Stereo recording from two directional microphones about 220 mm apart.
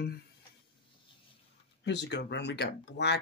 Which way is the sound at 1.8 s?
50° left (ahead or behind).